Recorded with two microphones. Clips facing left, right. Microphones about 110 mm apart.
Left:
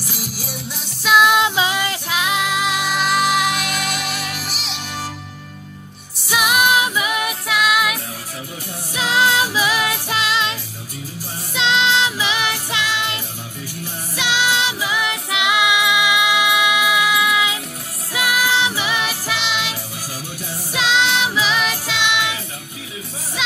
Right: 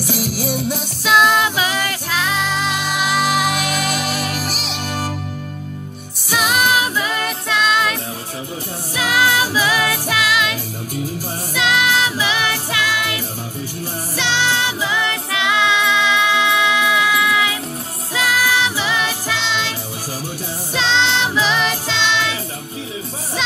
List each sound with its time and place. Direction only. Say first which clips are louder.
0.0 s music: right 9 dB; 70° right (ahead or behind)
1.0 s music: even; 5° left (ahead or behind)
1.4 s music: left 1 dB; 20° left (ahead or behind); by 3.9 s centre (ahead or behind)
4.2 s music: right 5 dB; 45° right (ahead or behind)
6.3 s music: even; 15° left (ahead or behind)
8.9 s music: even; 25° left (ahead or behind)
14.1 s music: even; 15° left (ahead or behind)
20.7 s music: even; 10° left (ahead or behind)